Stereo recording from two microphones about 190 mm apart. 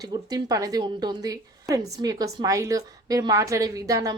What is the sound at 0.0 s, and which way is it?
A woman's voice, 20° right (ahead or behind).